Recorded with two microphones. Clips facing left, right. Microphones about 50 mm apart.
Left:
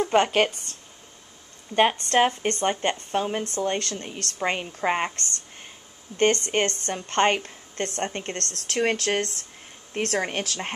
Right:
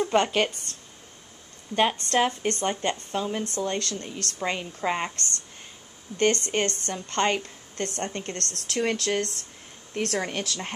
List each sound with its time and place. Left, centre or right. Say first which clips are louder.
0.1 s speech: left 4 dB; left
1.8 s a woman's voice: left 3 dB; left